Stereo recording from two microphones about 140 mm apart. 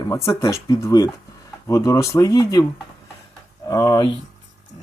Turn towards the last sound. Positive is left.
turn(degrees=25)  # may be behind; listen again after turning